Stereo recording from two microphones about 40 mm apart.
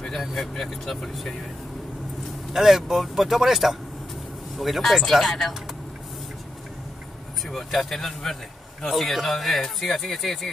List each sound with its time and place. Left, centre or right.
0.2 s speech: centre
2.5 s speech: centre
7.4 s speech: centre